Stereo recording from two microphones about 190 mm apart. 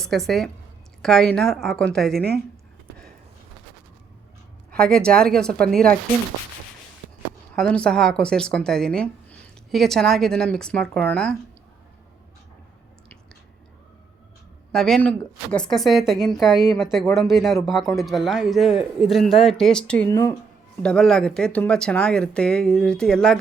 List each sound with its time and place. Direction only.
0.3 s speech: centre (ahead or behind)
2.1 s speech: 55° right (ahead or behind)
4.7 s speech: 5° left (ahead or behind)
7.5 s speech: 5° left (ahead or behind)
14.7 s speech: 5° left (ahead or behind)
20.1 s speech: 15° left (ahead or behind)
20.8 s speech: 5° left (ahead or behind)